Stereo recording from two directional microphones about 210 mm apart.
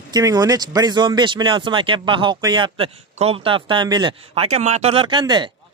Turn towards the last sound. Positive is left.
turn(degrees=-20)  # may be behind; listen again after turning